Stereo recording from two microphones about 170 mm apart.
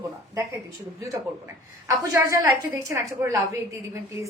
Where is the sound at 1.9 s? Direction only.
15° right (ahead or behind).